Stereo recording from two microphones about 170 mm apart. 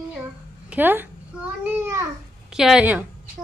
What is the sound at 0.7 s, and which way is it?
Speech, 10° right (ahead or behind).